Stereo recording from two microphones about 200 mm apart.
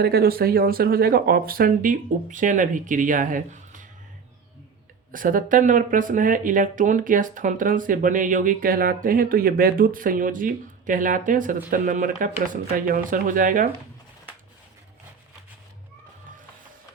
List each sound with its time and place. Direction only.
0.0 s speech: 50° right (ahead or behind)
5.1 s speech: 45° right (ahead or behind)